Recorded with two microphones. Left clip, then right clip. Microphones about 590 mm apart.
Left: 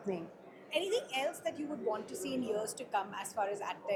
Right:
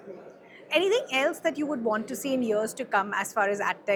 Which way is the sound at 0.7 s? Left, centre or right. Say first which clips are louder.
Right 10 dB; right.